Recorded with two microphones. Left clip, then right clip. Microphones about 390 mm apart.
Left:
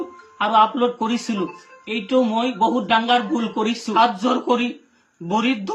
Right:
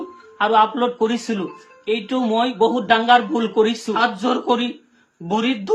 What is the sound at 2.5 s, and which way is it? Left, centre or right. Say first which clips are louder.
Speech: right 1 dB; centre.